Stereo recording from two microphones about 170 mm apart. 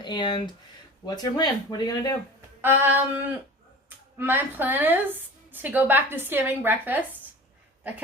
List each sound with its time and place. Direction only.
0.0 s speech: 25° left (ahead or behind)
2.6 s a woman's voice: 10° right (ahead or behind)